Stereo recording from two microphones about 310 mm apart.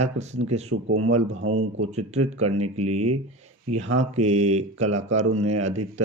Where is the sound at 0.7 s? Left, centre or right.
Right.